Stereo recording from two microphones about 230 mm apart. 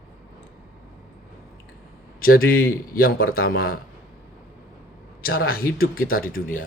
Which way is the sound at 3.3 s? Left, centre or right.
Left.